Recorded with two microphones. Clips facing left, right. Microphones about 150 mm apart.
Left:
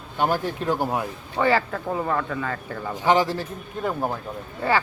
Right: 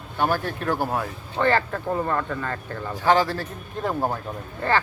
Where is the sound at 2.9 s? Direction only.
15° left (ahead or behind).